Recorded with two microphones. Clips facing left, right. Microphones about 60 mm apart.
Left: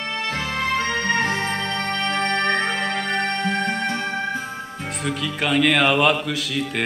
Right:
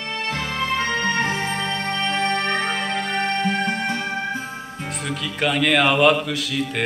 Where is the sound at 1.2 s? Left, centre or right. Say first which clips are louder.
Even; left.